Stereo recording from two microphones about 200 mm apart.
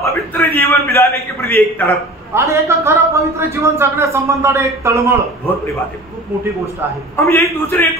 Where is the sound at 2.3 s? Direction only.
15° right (ahead or behind).